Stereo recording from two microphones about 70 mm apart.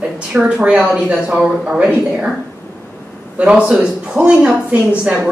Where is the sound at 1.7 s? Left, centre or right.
Centre.